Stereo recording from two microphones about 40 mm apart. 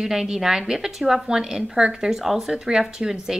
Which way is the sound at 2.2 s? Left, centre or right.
Centre.